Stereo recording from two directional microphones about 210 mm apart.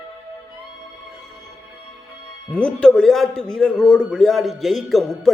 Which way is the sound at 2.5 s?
5° left (ahead or behind).